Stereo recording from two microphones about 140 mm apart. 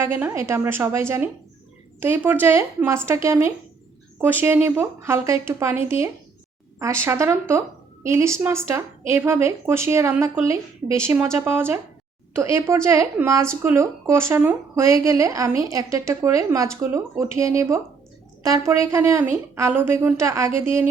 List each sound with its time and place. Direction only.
0.0 s speech: 15° right (ahead or behind)